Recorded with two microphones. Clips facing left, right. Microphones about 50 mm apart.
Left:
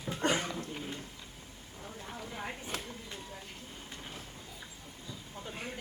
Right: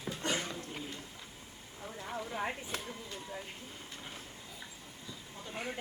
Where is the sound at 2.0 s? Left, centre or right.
Centre.